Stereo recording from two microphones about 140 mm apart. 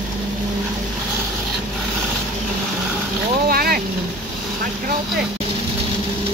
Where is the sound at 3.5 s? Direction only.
90° right.